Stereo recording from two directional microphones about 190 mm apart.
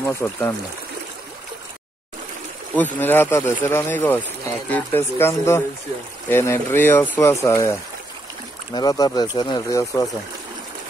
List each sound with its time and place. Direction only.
0.0 s speech: 15° left (ahead or behind)
2.7 s speech: 10° left (ahead or behind)
8.7 s speech: 20° left (ahead or behind)